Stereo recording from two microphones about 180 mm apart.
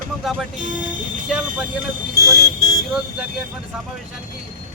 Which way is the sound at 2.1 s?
20° left (ahead or behind).